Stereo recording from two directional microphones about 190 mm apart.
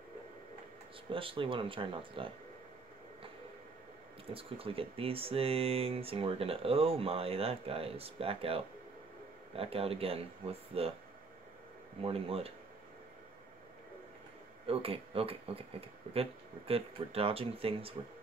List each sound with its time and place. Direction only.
1.1 s speech: 30° right (ahead or behind)
4.3 s speech: 30° right (ahead or behind)
12.0 s speech: 30° right (ahead or behind)
14.7 s speech: 30° right (ahead or behind)